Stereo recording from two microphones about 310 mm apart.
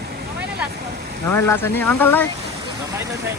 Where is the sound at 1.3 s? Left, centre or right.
Centre.